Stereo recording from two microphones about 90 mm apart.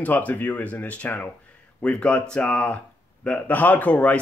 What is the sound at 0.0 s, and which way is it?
Speech, 15° left (ahead or behind).